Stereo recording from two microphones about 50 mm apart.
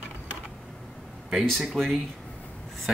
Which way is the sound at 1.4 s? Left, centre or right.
Centre.